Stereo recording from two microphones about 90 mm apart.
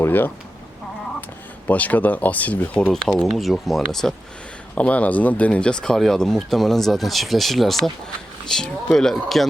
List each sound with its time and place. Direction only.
0.0 s speech: 20° left (ahead or behind)
1.6 s speech: 15° left (ahead or behind)
2.9 s speech: 5° left (ahead or behind)
4.7 s speech: 15° left (ahead or behind)